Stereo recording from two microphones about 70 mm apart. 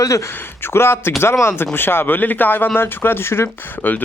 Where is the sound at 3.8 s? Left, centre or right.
Left.